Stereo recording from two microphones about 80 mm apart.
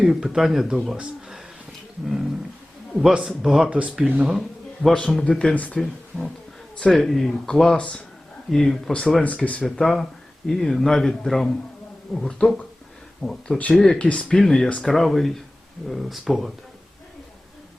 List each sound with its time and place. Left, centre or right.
0.0 s speech: centre
2.9 s speech: centre
3.7 s speech: centre
4.8 s speech: centre
5.5 s speech: centre
8.4 s speech: centre
9.6 s speech: centre
13.6 s speech: centre